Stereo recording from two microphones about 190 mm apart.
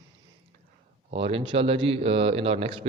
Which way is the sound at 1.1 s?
30° right (ahead or behind).